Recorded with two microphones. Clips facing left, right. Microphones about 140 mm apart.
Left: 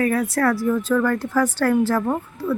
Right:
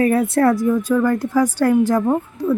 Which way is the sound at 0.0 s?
25° right (ahead or behind).